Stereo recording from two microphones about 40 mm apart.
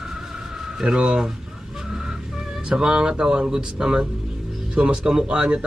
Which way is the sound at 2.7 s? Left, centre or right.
Right.